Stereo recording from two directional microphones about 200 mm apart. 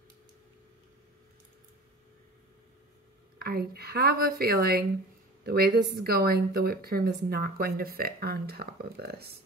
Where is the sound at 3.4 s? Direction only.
50° right (ahead or behind).